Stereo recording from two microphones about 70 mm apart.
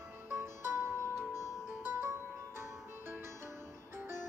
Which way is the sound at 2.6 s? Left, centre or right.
Right.